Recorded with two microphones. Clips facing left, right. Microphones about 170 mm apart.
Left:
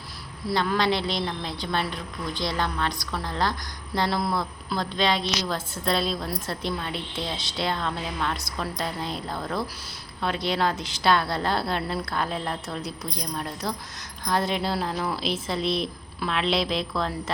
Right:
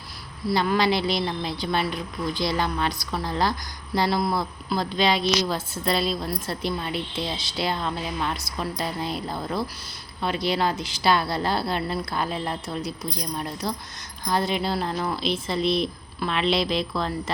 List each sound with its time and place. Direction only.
0.4 s a woman's voice: 5° right (ahead or behind)